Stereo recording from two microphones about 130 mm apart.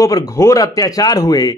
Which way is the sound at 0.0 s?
25° left (ahead or behind).